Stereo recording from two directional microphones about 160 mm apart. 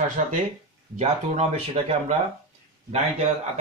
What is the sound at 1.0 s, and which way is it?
Speech, 40° right (ahead or behind).